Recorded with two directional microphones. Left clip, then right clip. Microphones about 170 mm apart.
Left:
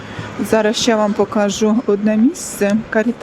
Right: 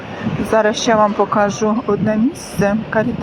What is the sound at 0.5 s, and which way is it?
Speech, 50° left (ahead or behind).